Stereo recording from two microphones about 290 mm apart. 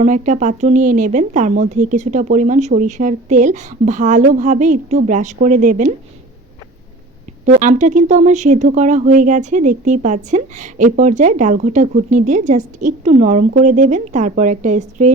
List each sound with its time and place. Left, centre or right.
0.0 s speech: right
7.4 s speech: right